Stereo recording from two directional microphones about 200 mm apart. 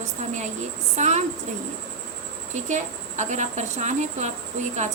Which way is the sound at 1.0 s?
35° right (ahead or behind).